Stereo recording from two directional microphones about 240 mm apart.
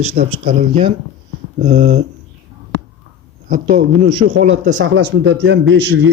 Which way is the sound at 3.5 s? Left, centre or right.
Right.